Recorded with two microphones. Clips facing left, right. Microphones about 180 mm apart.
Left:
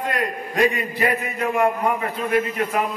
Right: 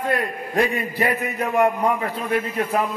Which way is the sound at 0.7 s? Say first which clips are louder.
Even; 35° right (ahead or behind).